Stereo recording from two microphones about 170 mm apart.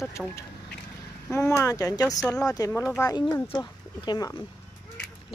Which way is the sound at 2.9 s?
20° left (ahead or behind).